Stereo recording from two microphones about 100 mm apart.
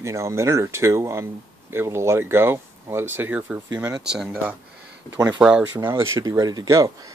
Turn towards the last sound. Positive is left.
turn(degrees=-35)  # may be behind; listen again after turning